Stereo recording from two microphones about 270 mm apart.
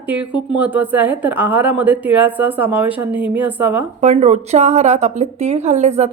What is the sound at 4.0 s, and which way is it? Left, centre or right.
Speech, right.